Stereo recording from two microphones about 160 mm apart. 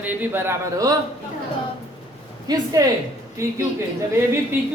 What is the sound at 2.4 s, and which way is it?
A woman's voice, 20° right (ahead or behind).